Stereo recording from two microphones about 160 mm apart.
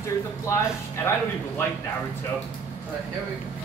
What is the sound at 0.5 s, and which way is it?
Speech, 20° left (ahead or behind).